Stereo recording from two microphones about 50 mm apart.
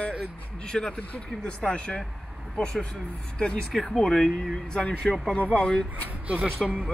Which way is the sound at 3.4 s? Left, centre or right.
Left.